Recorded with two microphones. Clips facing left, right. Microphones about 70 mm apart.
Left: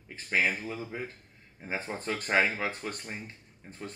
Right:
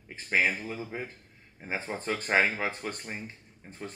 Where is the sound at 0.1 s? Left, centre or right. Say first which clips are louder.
Right 1 dB; right.